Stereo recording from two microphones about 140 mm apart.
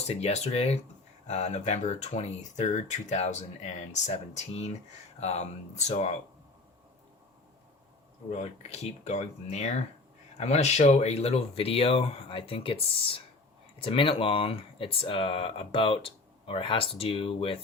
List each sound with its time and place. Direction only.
0.1 s speech: 50° left (ahead or behind)
8.3 s speech: 50° left (ahead or behind)